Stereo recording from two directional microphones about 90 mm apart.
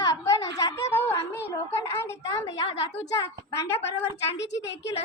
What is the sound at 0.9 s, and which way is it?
A woman's voice, 25° left (ahead or behind).